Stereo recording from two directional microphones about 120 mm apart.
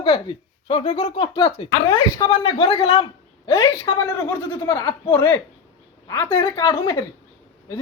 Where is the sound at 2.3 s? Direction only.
50° left (ahead or behind).